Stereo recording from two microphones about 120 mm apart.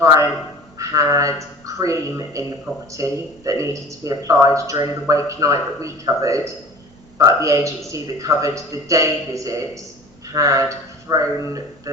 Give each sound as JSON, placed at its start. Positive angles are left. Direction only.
{"t": 0.0, "sound": "speech", "side_deg": -25}